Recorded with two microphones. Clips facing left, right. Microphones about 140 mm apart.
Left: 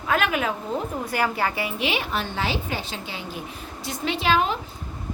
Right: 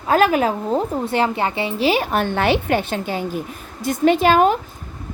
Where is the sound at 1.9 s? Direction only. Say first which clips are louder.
Right 8 dB; 50° right (ahead or behind).